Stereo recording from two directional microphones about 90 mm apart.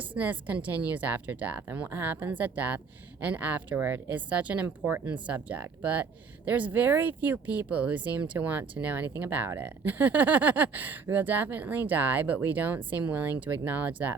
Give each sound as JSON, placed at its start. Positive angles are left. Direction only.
{"t": 0.0, "sound": "speech", "side_deg": -20}